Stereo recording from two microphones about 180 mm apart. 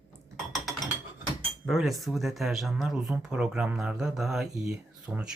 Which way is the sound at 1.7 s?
Centre (ahead or behind).